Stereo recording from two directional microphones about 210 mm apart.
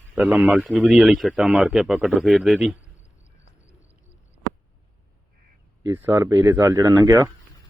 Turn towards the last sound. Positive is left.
turn(degrees=-15)  # may be behind; listen again after turning